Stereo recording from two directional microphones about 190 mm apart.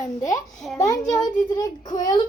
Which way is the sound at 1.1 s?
20° left (ahead or behind).